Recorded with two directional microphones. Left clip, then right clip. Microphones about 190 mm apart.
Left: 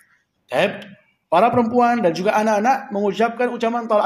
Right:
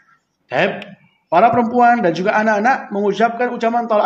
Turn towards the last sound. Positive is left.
turn(degrees=35)  # may be behind; listen again after turning